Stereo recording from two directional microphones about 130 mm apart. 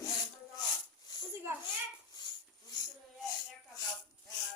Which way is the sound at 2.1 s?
35° left (ahead or behind).